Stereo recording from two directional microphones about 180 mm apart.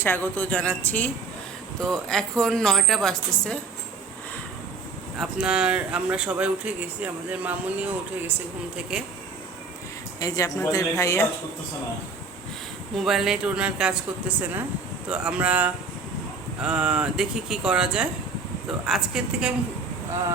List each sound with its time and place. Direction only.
0.0 s a woman's voice: 10° left (ahead or behind)
5.1 s speech: 5° right (ahead or behind)
8.7 s speech: 5° right (ahead or behind)
10.2 s speech: 20° left (ahead or behind)
13.0 s speech: centre (ahead or behind)